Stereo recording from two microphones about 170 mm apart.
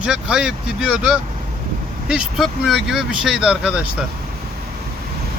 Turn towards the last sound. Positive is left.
turn(degrees=-5)  # may be behind; listen again after turning